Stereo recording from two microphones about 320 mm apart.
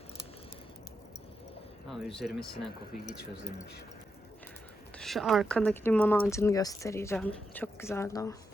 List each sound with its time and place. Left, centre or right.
1.9 s speech: centre
4.9 s speech: centre